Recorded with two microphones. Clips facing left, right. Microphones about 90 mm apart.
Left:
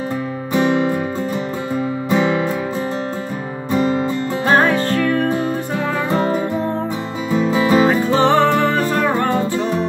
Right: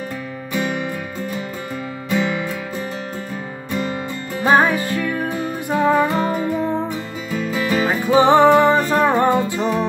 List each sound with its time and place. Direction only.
0.6 s music: 30° left (ahead or behind)
2.0 s music: 30° left (ahead or behind)
3.7 s music: 30° left (ahead or behind)
4.5 s music: 15° right (ahead or behind)
7.2 s music: 25° left (ahead or behind)
8.1 s music: 15° right (ahead or behind)